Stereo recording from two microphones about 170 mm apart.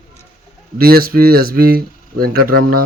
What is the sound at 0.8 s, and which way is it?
Speech, 60° right (ahead or behind).